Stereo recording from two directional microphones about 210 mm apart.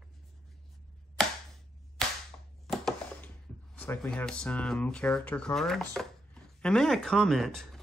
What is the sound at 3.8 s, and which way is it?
Speech, 5° left (ahead or behind).